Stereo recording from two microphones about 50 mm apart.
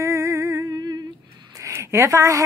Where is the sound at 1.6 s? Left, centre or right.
Right.